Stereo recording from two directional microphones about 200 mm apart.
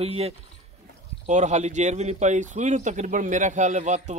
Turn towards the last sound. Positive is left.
turn(degrees=-35)  # may be behind; listen again after turning